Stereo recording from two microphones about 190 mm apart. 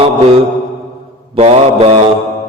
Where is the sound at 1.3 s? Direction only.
30° right (ahead or behind).